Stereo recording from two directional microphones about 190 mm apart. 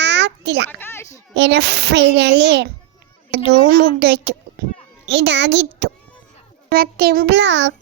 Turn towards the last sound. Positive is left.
turn(degrees=-70)  # may be behind; listen again after turning